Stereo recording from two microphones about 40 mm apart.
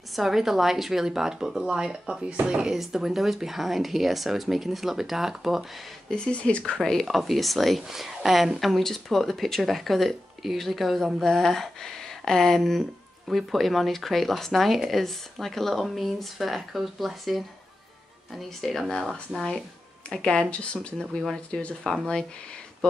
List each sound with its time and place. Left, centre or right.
0.1 s a woman's voice: centre
6.0 s speech: left
6.8 s a woman's voice: centre
20.2 s speech: left